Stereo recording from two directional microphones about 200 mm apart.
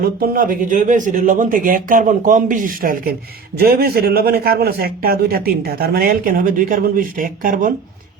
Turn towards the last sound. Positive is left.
turn(degrees=-40)  # may be behind; listen again after turning